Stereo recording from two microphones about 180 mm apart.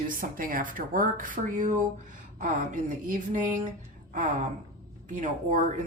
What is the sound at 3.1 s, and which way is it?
Speech, 45° right (ahead or behind).